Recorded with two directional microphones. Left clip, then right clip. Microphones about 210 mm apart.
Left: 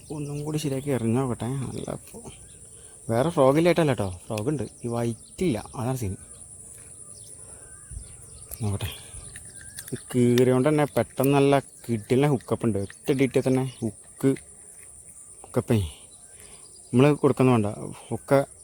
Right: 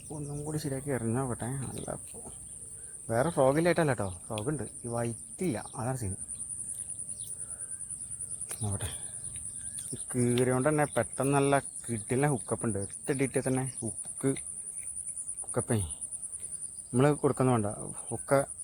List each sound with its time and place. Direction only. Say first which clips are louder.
0.1 s speech: left 6 dB; 45° left (ahead or behind)
4.4 s insect: left 7 dB; 40° left (ahead or behind)
5.4 s speech: left 6 dB; 40° left (ahead or behind)
8.6 s speech: left 7 dB; 40° left (ahead or behind)
10.1 s speech: left 8 dB; 40° left (ahead or behind)
10.4 s insect: left 4 dB; 45° left (ahead or behind)
10.9 s speech: left 6 dB; 40° left (ahead or behind)
15.5 s speech: left 7 dB; 40° left (ahead or behind)
16.9 s insect: left 6 dB; 40° left (ahead or behind)